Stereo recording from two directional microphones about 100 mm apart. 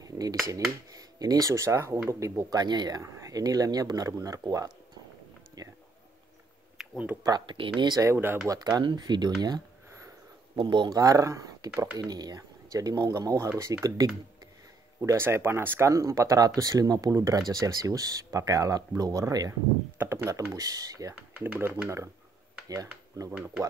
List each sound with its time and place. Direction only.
0.0 s speech: 40° right (ahead or behind)
6.8 s a sound: 5° right (ahead or behind)
7.2 s speech: 45° right (ahead or behind)
7.5 s speech: 55° right (ahead or behind)
8.0 s speech: 25° right (ahead or behind)
8.5 s speech: 40° right (ahead or behind)
10.9 s speech: 35° right (ahead or behind)
21.1 s speech: 20° right (ahead or behind)
23.3 s speech: 10° right (ahead or behind)